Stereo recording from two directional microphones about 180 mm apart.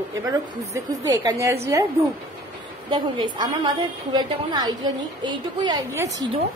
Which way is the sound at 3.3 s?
25° right (ahead or behind).